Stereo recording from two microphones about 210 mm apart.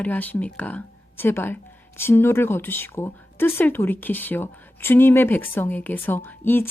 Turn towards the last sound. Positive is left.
turn(degrees=10)  # may be behind; listen again after turning